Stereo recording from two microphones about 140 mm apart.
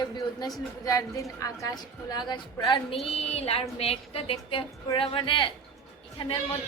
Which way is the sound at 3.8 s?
45° left (ahead or behind).